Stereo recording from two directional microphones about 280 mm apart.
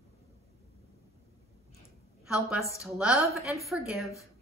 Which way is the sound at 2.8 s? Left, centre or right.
Centre.